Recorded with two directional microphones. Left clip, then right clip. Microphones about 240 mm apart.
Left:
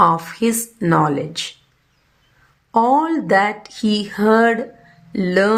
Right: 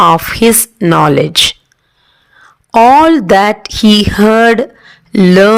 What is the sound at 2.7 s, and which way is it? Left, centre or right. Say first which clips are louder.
Speech: right 11 dB; right.